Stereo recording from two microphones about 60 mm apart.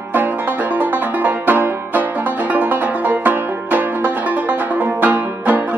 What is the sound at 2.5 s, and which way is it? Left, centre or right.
Music, right.